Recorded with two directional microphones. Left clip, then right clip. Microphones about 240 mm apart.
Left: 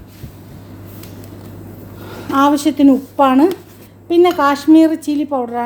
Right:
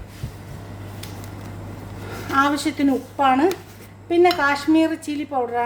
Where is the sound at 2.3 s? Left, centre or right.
Left.